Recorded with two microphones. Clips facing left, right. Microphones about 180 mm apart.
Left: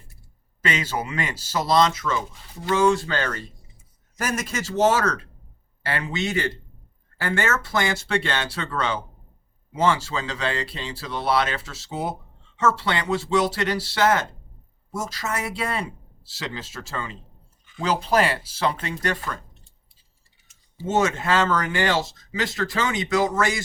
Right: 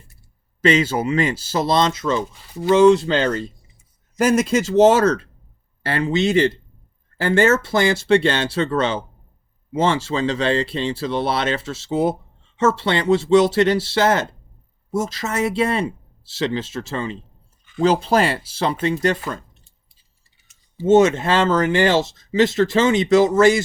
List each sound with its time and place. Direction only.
0.6 s speech: 30° right (ahead or behind)
20.8 s speech: 20° right (ahead or behind)